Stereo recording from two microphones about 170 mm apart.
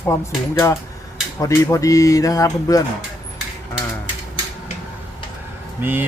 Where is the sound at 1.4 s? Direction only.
15° left (ahead or behind).